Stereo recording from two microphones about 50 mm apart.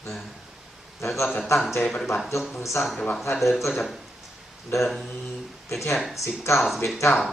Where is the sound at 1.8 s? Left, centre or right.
Centre.